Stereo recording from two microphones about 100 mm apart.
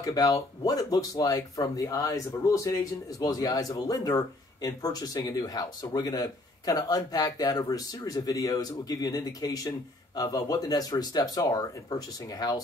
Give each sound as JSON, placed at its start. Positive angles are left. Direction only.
{"t": 0.0, "sound": "speech", "side_deg": 35}